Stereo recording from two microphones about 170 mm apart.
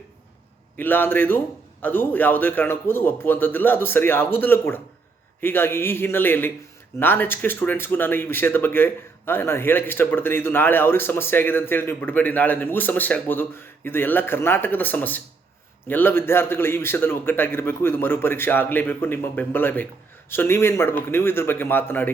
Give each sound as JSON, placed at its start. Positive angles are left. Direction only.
{"t": 0.8, "sound": "speech", "side_deg": 10}